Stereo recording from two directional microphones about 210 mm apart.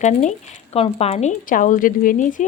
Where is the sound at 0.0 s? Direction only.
35° left (ahead or behind).